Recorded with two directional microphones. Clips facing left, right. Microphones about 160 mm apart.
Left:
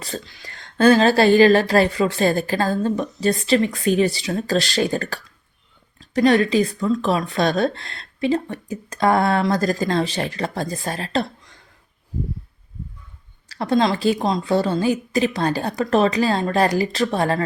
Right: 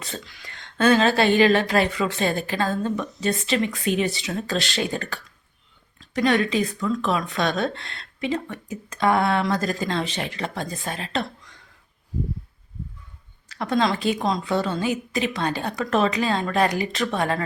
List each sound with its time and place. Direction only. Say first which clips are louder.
0.0 s speech: left 4 dB; 35° left (ahead or behind)
13.5 s speech: left 3 dB; 35° left (ahead or behind)